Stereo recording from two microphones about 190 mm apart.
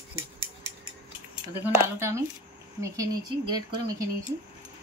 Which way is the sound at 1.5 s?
15° right (ahead or behind).